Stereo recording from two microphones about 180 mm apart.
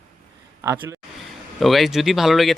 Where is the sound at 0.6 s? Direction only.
15° right (ahead or behind).